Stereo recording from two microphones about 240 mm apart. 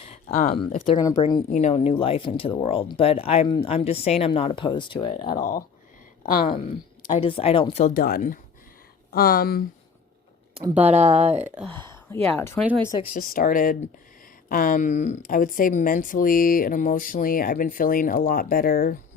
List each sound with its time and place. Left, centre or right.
0.0 s a sound: left
0.9 s speech: centre
1.5 s speech: left
6.2 s speech: left
6.7 s speech: left
10.8 s speech: right
11.7 s speech: centre
13.1 s speech: left